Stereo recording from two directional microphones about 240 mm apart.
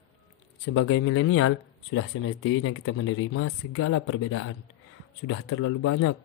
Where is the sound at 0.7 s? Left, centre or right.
Left.